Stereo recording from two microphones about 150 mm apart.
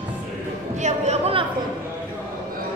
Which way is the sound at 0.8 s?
50° right (ahead or behind).